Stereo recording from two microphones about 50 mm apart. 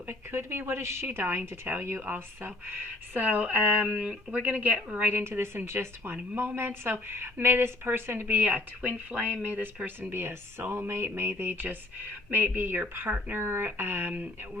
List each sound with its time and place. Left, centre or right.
0.1 s speech: right
1.0 s speech: right
3.2 s speech: right
3.8 s speech: centre
4.3 s speech: right
5.1 s speech: right
13.3 s speech: right
13.7 s speech: right